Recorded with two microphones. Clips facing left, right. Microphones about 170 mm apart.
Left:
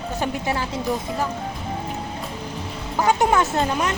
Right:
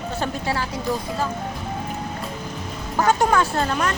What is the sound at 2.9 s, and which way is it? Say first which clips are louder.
Speech: even; 15° left (ahead or behind).